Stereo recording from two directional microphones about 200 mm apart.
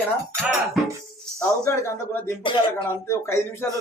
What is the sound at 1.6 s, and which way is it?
Speech, 15° left (ahead or behind).